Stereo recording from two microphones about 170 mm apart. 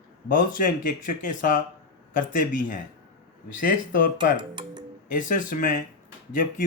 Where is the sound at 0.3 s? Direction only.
50° left (ahead or behind).